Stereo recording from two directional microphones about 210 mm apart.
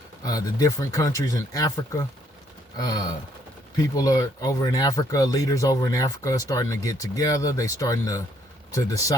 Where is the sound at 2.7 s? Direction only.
20° left (ahead or behind).